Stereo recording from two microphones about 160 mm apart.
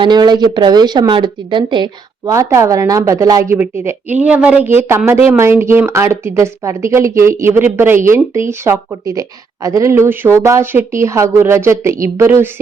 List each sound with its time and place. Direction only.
0.0 s speech: 25° right (ahead or behind)